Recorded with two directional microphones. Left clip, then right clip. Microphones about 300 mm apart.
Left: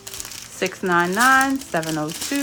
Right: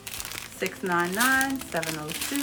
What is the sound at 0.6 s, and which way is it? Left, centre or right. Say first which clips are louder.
Speech: left 7 dB; centre.